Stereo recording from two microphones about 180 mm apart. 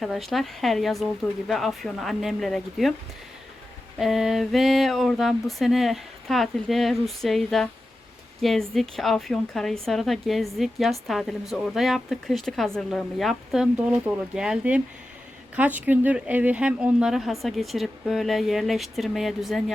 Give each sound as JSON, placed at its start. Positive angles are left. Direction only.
{"t": 0.0, "sound": "a woman's voice", "side_deg": 0}
{"t": 3.9, "sound": "a woman's voice", "side_deg": 0}